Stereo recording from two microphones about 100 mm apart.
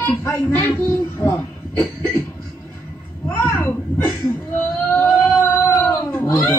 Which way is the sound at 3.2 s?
25° left (ahead or behind).